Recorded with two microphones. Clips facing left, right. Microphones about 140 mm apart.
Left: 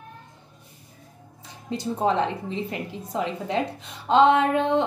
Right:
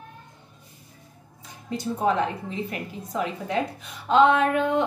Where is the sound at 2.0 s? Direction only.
25° left (ahead or behind).